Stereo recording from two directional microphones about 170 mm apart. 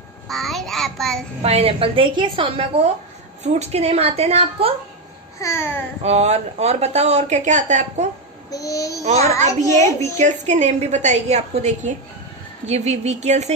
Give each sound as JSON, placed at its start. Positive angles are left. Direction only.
{"t": 0.3, "sound": "child singing", "side_deg": 0}
{"t": 1.4, "sound": "speech", "side_deg": -35}
{"t": 5.4, "sound": "speech", "side_deg": 15}
{"t": 6.0, "sound": "speech", "side_deg": -40}
{"t": 8.5, "sound": "child singing", "side_deg": 20}
{"t": 9.6, "sound": "a woman's voice", "side_deg": -45}